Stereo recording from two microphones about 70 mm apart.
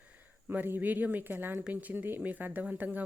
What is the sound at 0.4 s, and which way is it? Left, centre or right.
Speech, right.